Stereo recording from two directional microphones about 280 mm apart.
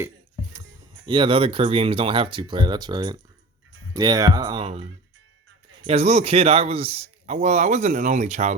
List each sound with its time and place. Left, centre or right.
1.0 s a man's voice: centre